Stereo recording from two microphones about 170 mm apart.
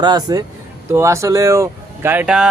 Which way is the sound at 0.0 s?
25° right (ahead or behind).